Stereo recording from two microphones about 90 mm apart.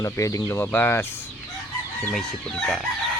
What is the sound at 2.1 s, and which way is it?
Chicken, 5° left (ahead or behind).